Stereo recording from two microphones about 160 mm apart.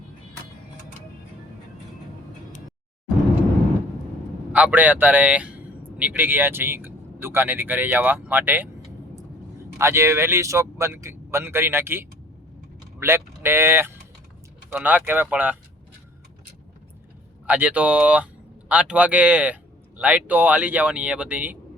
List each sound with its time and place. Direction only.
4.5 s speech: 10° right (ahead or behind)
9.7 s speech: 15° right (ahead or behind)
17.4 s speech: 10° right (ahead or behind)